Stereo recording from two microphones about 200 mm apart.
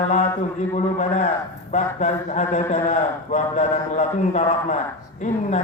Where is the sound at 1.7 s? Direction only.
35° left (ahead or behind).